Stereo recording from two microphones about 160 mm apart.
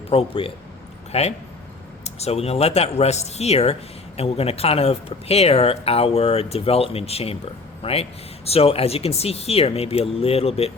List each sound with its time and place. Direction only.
0.1 s speech: 35° left (ahead or behind)